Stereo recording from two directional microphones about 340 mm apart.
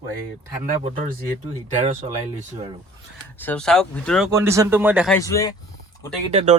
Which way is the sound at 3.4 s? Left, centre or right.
Centre.